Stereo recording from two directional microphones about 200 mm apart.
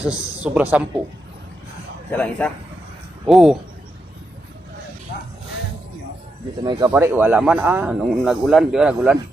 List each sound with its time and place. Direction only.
0.0 s speech: 5° right (ahead or behind)
2.0 s speech: 10° left (ahead or behind)
6.7 s speech: 20° right (ahead or behind); by 9.1 s 5° right (ahead or behind)